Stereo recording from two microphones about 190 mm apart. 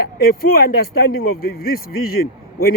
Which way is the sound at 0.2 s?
50° left (ahead or behind).